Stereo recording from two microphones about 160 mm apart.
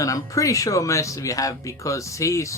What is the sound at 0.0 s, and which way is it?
Speech, 20° left (ahead or behind).